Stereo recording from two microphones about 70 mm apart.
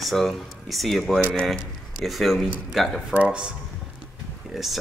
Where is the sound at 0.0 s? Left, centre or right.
Centre.